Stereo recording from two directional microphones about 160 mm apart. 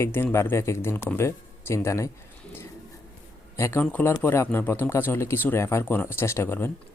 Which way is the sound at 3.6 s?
15° left (ahead or behind).